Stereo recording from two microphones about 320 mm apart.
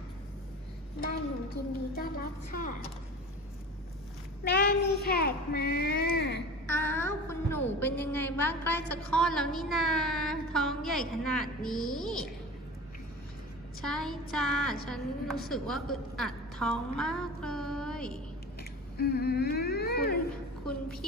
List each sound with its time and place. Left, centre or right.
1.0 s a woman's voice: left
4.5 s speech: left
6.6 s a woman's voice: centre
13.8 s a woman's voice: centre
18.6 s speech: left